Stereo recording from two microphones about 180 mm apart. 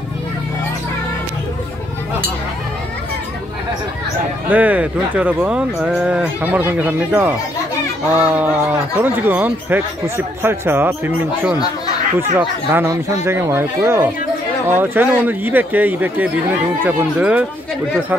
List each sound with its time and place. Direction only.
4.5 s speech: 10° right (ahead or behind)